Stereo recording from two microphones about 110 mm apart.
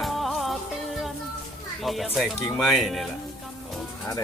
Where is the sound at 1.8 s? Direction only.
Centre (ahead or behind).